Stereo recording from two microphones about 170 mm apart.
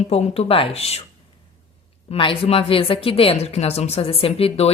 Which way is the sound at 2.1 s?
30° left (ahead or behind).